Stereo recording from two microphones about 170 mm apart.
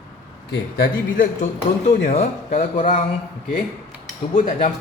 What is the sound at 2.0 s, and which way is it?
Speech, 40° left (ahead or behind).